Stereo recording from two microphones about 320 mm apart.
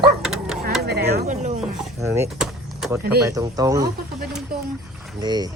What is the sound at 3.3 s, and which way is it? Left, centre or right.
Speech, centre.